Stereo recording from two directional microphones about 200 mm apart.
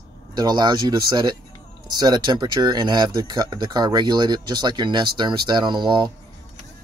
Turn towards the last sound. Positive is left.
turn(degrees=-20)  # may be behind; listen again after turning